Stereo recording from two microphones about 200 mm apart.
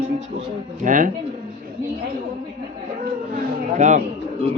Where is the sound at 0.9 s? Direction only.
40° right (ahead or behind).